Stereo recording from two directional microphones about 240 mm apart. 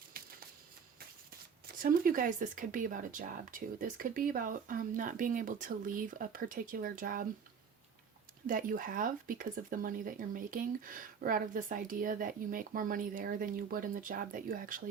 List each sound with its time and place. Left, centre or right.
0.1 s shuffling cards: right
1.6 s speech: right
8.4 s speech: right